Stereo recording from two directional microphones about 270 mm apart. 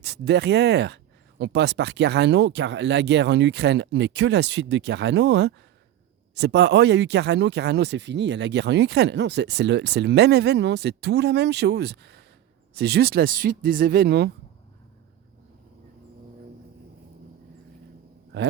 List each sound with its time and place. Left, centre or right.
0.0 s speech: right